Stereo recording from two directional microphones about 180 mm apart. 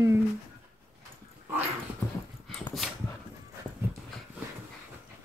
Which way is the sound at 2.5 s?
Centre (ahead or behind).